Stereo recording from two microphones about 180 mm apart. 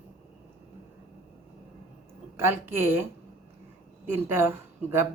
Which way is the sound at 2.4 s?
15° right (ahead or behind).